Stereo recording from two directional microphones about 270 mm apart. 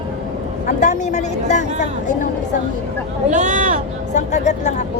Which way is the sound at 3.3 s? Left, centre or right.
Right.